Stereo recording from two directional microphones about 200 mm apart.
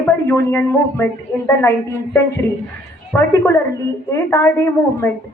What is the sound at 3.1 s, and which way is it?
A woman's voice, 15° left (ahead or behind).